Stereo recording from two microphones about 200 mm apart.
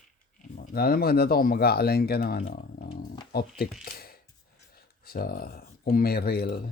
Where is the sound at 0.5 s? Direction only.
45° left (ahead or behind).